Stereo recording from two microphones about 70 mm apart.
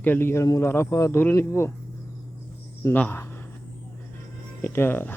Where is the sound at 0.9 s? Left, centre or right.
Left.